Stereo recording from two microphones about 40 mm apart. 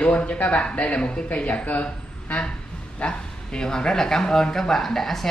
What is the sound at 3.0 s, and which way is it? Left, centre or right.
Speech, centre.